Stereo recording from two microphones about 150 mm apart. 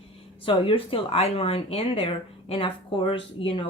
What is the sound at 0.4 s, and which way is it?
Speech, 35° left (ahead or behind).